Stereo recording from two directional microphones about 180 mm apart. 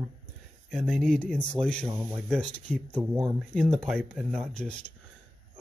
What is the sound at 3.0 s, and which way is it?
Speech, 10° right (ahead or behind).